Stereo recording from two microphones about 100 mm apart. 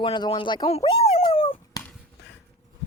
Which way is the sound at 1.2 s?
60° left (ahead or behind).